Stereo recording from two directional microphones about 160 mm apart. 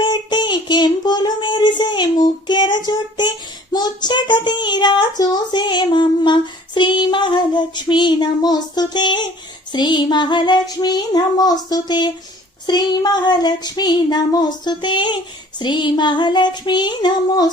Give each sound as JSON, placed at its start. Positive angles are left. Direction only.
{"t": 0.0, "sound": "child singing", "side_deg": 30}